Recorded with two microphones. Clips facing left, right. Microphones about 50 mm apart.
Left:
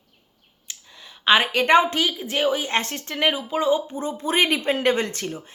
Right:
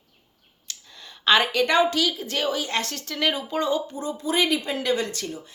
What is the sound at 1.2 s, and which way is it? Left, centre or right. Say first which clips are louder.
Speech: left 1 dB; centre.